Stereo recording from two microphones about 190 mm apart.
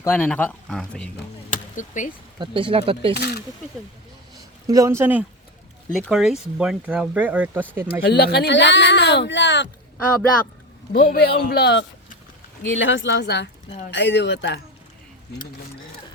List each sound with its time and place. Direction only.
0.0 s speech: 10° left (ahead or behind)
1.5 s chop: 40° left (ahead or behind)
2.4 s speech: 25° right (ahead or behind)
3.2 s a man's voice: 60° left (ahead or behind)
4.6 s speech: 15° right (ahead or behind)
8.0 s speech: 55° left (ahead or behind)
10.9 s a man's voice: 55° left (ahead or behind)